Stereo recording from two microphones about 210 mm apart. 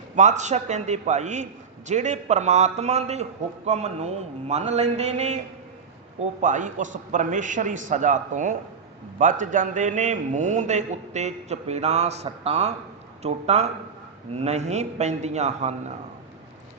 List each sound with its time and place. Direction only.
0.2 s a man's voice: 35° right (ahead or behind)
6.4 s a man's voice: 35° right (ahead or behind)